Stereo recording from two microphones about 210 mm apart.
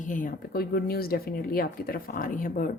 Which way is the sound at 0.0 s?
40° left (ahead or behind).